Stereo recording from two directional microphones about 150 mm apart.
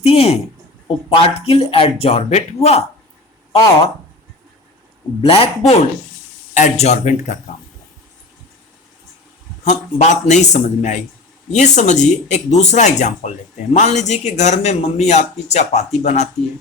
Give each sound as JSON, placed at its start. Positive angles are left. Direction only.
{"t": 0.0, "sound": "a sound", "side_deg": 40}
{"t": 0.9, "sound": "speech", "side_deg": 40}
{"t": 5.2, "sound": "speech", "side_deg": 40}
{"t": 9.6, "sound": "speech", "side_deg": 50}